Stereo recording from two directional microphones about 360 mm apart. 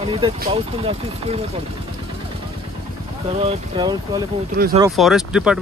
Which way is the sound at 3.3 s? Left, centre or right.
Centre.